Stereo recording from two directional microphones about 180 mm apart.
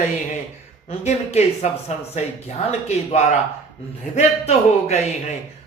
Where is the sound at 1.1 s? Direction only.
35° left (ahead or behind).